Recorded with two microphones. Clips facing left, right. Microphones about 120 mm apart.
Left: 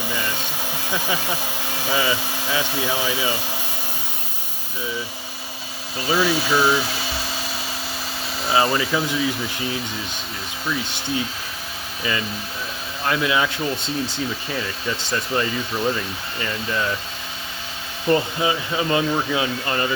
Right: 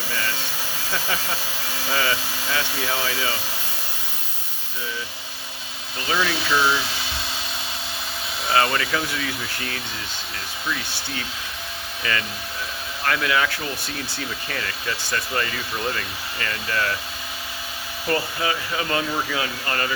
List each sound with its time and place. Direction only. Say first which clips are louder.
0.1 s hair dryer: right 1 dB; 20° left (ahead or behind)
0.9 s speech: left 2 dB; 15° left (ahead or behind)
6.1 s speech: left 3 dB; 10° left (ahead or behind)
8.4 s speech: left 2 dB; centre (ahead or behind)
9.0 s speech: left 5 dB; 15° left (ahead or behind)
13.1 s speech: left 2 dB; 20° left (ahead or behind)
18.1 s speech: left 5 dB; 20° left (ahead or behind)